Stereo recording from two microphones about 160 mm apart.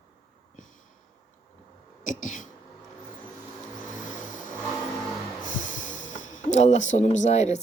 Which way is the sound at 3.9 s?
55° left (ahead or behind).